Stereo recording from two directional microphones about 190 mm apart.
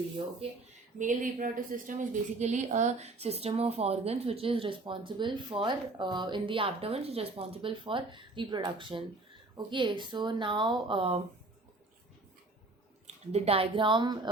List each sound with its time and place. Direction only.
0.9 s a woman's voice: 40° right (ahead or behind)
13.1 s a woman's voice: 35° right (ahead or behind)